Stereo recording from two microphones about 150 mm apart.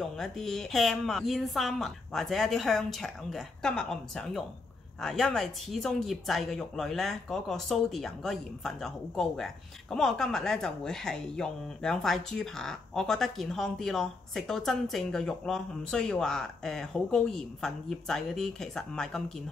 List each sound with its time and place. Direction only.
0.0 s speech: 5° left (ahead or behind)